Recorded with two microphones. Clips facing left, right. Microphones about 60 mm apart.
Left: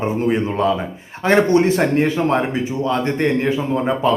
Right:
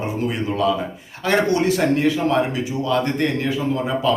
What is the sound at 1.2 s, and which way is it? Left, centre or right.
Speech, left.